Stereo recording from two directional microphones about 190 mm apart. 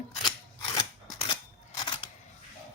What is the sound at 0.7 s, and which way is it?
Scissors, 30° left (ahead or behind).